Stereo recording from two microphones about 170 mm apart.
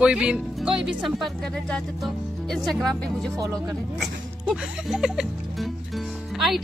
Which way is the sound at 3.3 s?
20° right (ahead or behind).